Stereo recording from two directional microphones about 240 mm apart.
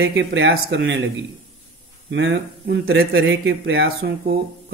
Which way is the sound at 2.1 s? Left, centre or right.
Right.